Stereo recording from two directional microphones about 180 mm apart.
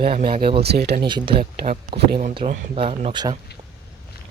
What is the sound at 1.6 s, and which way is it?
Speech, 40° right (ahead or behind).